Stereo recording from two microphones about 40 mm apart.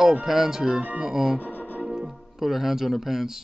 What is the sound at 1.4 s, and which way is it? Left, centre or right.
Music, left.